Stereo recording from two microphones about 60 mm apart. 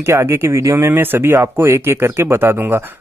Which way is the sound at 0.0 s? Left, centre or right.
Right.